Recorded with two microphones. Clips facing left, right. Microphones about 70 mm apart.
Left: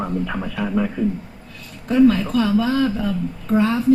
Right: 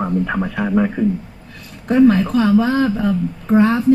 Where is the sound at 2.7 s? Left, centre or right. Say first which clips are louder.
Right 3 dB; right.